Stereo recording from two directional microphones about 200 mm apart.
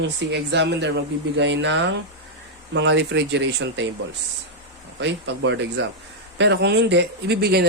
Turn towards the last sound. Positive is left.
turn(degrees=-55)  # may be behind; listen again after turning